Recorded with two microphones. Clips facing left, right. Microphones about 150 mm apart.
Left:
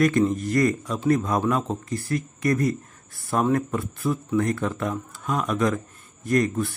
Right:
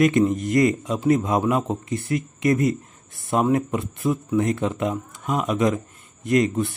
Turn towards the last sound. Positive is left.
turn(degrees=-20)  # may be behind; listen again after turning